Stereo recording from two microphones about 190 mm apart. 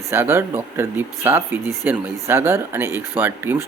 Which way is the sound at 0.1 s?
10° right (ahead or behind).